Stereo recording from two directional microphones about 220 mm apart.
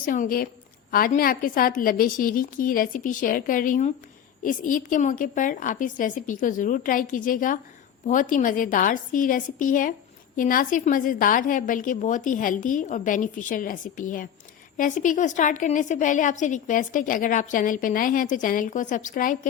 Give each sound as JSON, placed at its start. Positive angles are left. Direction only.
{"t": 0.0, "sound": "a woman's voice", "side_deg": 40}